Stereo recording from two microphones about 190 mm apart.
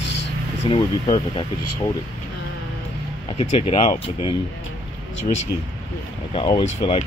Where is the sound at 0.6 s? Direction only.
25° left (ahead or behind).